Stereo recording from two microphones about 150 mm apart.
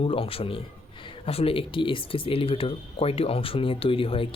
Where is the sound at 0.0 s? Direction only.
40° left (ahead or behind).